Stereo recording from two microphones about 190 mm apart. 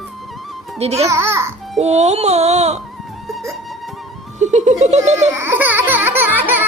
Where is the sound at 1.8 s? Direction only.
35° right (ahead or behind).